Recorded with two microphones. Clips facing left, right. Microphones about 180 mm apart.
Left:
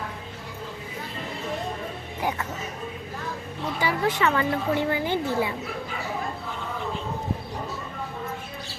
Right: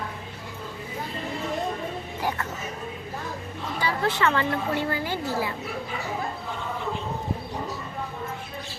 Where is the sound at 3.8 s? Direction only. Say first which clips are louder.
Left 1 dB; 15° left (ahead or behind).